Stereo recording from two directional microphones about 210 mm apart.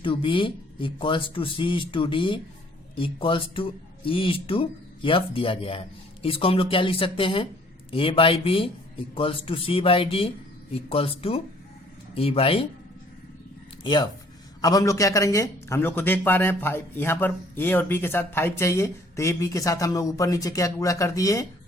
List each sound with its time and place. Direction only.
0.0 s speech: 25° left (ahead or behind)
13.8 s a man's voice: 20° left (ahead or behind)